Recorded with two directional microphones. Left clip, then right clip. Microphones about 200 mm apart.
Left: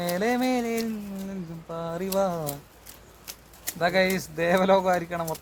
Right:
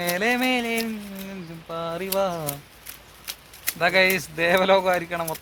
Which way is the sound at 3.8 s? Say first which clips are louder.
Right 4 dB; 15° right (ahead or behind).